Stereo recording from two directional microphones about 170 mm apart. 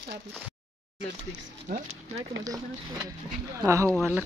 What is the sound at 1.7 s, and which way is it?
Speech, 50° right (ahead or behind).